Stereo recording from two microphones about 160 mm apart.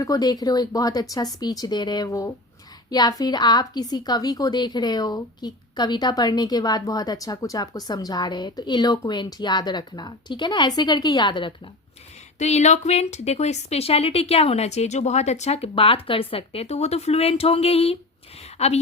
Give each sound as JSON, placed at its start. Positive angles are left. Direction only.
{"t": 0.0, "sound": "a woman's voice", "side_deg": 25}
{"t": 12.4, "sound": "a woman's voice", "side_deg": 45}